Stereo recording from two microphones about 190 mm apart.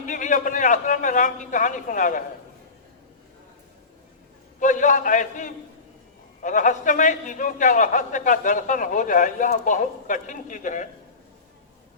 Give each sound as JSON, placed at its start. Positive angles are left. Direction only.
{"t": 0.0, "sound": "a man's voice", "side_deg": 40}
{"t": 4.6, "sound": "a man's voice", "side_deg": 40}